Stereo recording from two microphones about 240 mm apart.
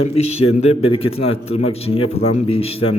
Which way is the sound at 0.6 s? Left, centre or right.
Left.